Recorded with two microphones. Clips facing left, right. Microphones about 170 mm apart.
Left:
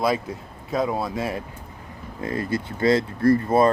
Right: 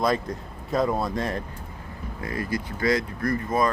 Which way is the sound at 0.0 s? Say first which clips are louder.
Left 1 dB; 5° left (ahead or behind).